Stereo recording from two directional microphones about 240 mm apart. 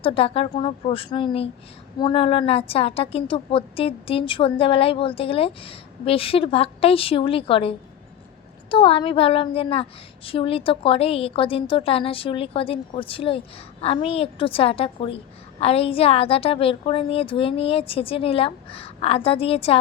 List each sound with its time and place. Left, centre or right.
0.0 s a woman's voice: left